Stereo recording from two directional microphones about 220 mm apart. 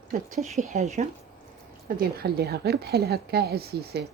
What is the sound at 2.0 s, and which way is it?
Speech, 45° right (ahead or behind).